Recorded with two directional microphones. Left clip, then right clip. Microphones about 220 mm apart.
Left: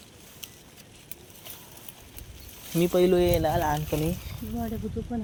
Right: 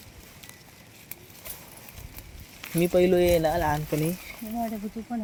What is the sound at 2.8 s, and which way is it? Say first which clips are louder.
Speech: right 1 dB; 5° right (ahead or behind).